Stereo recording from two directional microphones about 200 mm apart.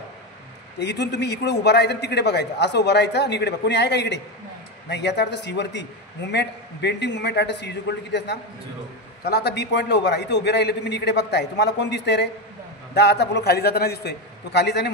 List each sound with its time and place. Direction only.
0.7 s a man's voice: 60° left (ahead or behind)